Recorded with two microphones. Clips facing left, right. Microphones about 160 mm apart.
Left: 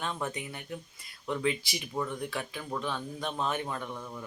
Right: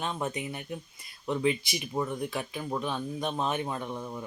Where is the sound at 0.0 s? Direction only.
20° right (ahead or behind).